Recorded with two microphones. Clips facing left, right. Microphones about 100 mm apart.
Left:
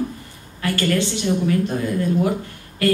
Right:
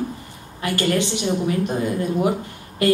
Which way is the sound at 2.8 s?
20° right (ahead or behind).